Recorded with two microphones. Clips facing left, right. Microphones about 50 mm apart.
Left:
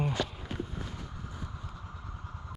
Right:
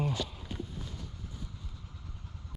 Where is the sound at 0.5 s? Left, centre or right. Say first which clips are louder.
Left 3 dB; left.